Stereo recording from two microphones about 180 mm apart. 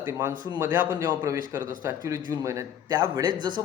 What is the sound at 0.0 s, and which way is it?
A man's voice, 15° right (ahead or behind).